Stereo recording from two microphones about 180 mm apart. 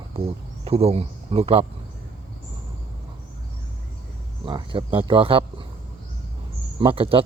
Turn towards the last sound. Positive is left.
turn(degrees=-30)  # may be behind; listen again after turning